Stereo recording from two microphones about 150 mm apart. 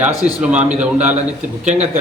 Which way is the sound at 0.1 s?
25° left (ahead or behind).